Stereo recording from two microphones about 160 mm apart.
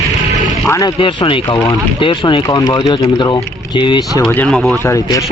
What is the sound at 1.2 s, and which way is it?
Speech, 30° left (ahead or behind).